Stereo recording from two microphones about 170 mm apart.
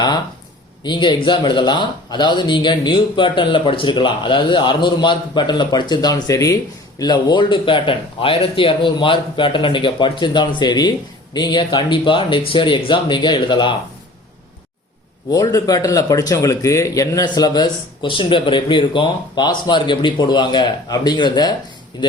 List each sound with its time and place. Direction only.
0.9 s a man's voice: 25° left (ahead or behind)
15.3 s a man's voice: 20° left (ahead or behind)